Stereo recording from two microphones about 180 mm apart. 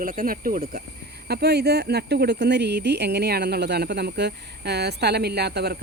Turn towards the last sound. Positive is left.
turn(degrees=-65)  # may be behind; listen again after turning